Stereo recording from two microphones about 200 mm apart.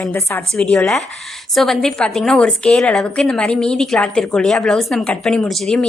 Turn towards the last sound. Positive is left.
turn(degrees=0)  # may be behind; listen again after turning